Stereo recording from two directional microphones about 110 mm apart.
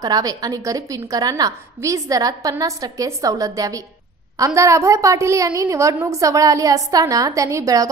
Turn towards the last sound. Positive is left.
turn(degrees=-30)  # may be behind; listen again after turning